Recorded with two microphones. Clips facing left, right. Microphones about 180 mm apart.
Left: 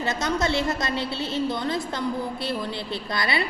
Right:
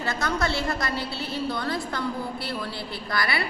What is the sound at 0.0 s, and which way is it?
A woman's voice, 20° left (ahead or behind).